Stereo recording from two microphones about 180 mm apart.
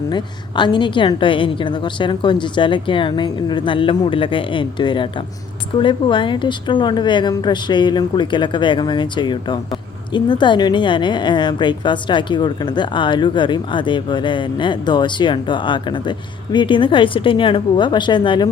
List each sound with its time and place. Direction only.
0.1 s a woman's voice: 25° left (ahead or behind)